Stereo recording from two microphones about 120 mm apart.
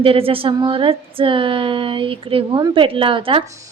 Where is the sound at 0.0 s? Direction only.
50° right (ahead or behind).